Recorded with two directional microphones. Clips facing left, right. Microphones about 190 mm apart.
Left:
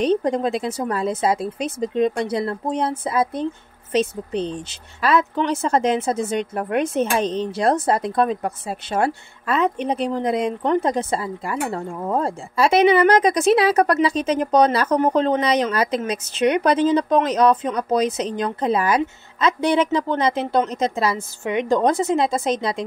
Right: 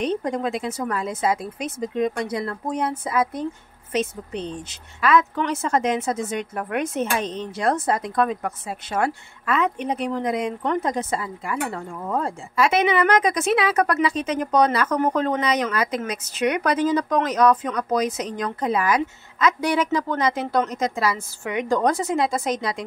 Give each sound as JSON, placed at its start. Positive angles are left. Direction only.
{"t": 0.0, "sound": "speech", "side_deg": 35}